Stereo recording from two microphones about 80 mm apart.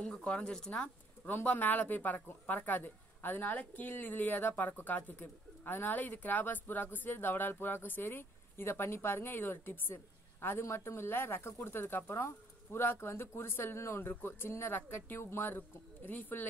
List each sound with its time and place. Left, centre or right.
0.0 s speech: centre